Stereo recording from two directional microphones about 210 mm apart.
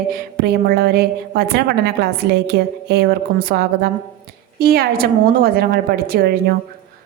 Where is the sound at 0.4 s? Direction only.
50° right (ahead or behind).